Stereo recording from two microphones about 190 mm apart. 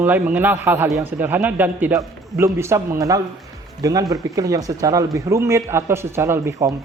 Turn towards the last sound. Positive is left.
turn(degrees=-15)  # may be behind; listen again after turning